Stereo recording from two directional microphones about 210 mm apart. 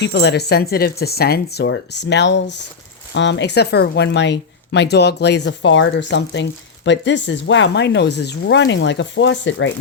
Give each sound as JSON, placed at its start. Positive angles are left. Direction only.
{"t": 0.0, "sound": "speech", "side_deg": 55}